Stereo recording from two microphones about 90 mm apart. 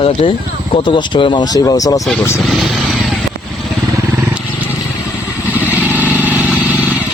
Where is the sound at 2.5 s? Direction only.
Centre (ahead or behind).